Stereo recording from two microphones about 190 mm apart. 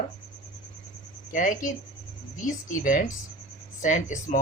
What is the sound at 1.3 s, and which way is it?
Speech, 45° left (ahead or behind).